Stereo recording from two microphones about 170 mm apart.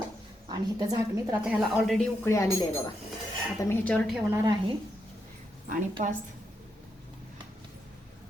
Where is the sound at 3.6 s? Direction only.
5° left (ahead or behind).